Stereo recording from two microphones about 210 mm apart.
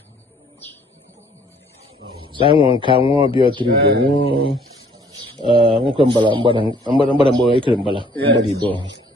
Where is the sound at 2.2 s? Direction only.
25° right (ahead or behind).